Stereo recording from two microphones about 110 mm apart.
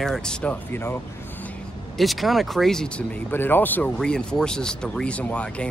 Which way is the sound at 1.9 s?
Centre (ahead or behind).